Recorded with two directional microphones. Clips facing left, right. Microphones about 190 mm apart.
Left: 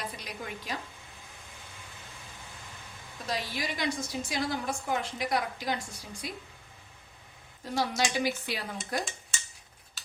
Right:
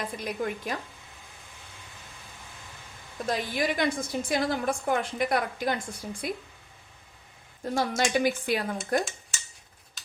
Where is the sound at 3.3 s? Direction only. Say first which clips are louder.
Right 6 dB; 55° right (ahead or behind).